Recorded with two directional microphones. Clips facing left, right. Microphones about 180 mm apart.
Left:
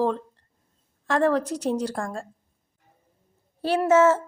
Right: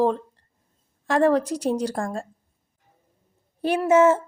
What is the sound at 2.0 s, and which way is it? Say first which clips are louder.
Speech: right 3 dB; 25° right (ahead or behind).